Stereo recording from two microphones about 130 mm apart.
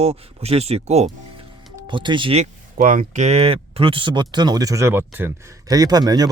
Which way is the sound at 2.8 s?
90° right.